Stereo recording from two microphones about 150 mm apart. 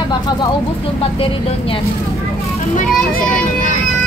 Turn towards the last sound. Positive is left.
turn(degrees=65)  # may be behind; listen again after turning